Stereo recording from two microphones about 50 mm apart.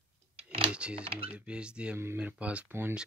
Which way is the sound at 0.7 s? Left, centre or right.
Right.